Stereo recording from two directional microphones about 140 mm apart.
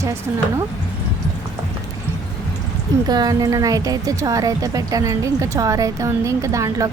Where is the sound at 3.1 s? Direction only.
25° right (ahead or behind).